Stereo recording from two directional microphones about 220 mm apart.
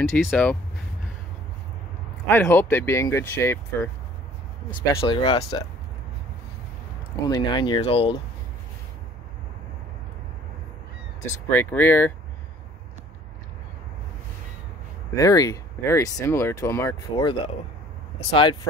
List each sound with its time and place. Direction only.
0.3 s speech: 5° left (ahead or behind)
2.2 s speech: 10° left (ahead or behind)
7.2 s speech: 20° left (ahead or behind)
11.4 s speech: 10° left (ahead or behind)
15.1 s speech: 15° left (ahead or behind)